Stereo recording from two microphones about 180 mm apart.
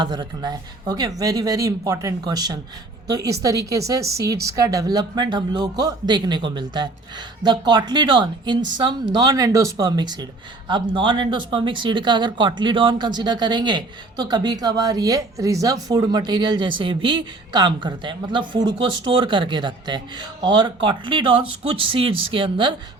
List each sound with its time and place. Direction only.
0.0 s speech: 25° right (ahead or behind)